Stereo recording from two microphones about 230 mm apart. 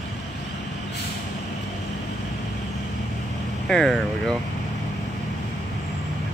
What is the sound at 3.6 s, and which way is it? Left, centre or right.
Speech, centre.